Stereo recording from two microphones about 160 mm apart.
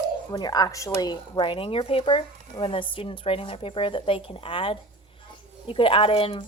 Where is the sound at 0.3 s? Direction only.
25° left (ahead or behind).